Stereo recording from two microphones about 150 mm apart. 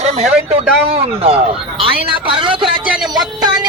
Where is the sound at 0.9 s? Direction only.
40° right (ahead or behind).